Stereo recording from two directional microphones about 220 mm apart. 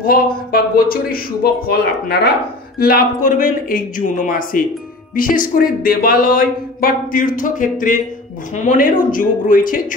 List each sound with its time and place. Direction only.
0.5 s speech: 45° left (ahead or behind)